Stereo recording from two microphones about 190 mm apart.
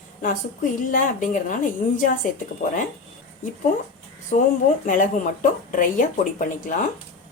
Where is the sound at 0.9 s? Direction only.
45° left (ahead or behind).